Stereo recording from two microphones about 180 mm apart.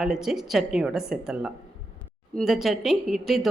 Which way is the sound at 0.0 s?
Centre (ahead or behind).